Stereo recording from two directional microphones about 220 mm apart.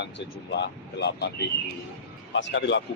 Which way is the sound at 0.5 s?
50° left (ahead or behind).